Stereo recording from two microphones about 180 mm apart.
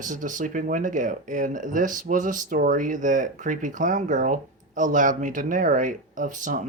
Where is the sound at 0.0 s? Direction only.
45° right (ahead or behind).